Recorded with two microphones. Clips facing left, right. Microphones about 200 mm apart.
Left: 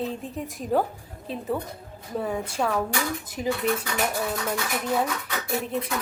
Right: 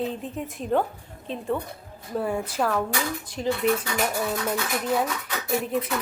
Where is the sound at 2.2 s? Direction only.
5° right (ahead or behind); by 3.5 s 10° left (ahead or behind).